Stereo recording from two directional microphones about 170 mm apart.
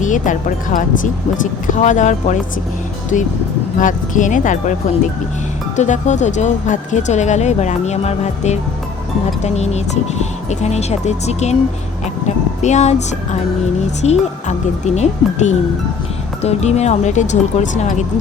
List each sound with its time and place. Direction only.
0.0 s speech: 50° left (ahead or behind)
3.8 s speech: 50° left (ahead or behind)
5.7 s speech: 45° left (ahead or behind)
12.6 s speech: 40° left (ahead or behind)